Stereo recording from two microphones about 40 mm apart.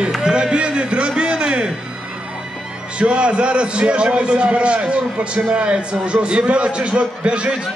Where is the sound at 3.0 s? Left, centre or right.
Right.